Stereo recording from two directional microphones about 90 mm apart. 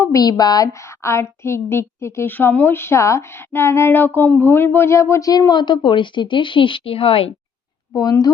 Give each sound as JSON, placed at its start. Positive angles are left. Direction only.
{"t": 0.0, "sound": "a woman's voice", "side_deg": 40}
{"t": 5.3, "sound": "a woman's voice", "side_deg": 50}
{"t": 7.9, "sound": "speech", "side_deg": 45}